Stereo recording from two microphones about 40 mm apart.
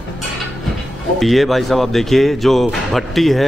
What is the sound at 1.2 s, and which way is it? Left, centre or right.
Speech, centre.